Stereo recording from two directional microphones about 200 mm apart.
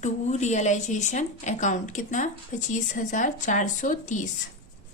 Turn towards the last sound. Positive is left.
turn(degrees=40)  # may be behind; listen again after turning